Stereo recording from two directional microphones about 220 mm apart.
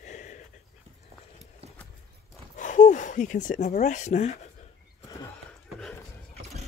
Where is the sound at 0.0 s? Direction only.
35° left (ahead or behind).